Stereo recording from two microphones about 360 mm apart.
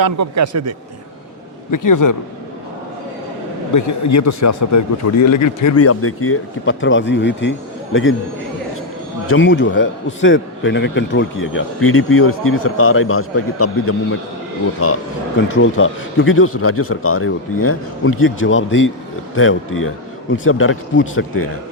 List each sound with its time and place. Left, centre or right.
0.0 s a man's voice: right
1.7 s a man's voice: left
3.8 s speech: left
9.3 s speech: left